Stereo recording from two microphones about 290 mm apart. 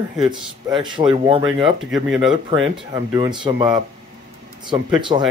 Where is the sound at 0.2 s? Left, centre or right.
Centre.